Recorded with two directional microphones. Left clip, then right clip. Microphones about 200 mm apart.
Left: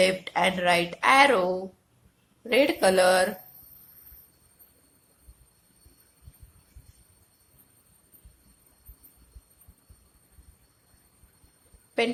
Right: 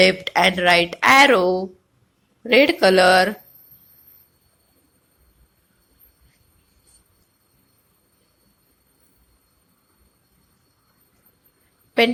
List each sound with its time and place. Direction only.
0.0 s speech: 20° right (ahead or behind)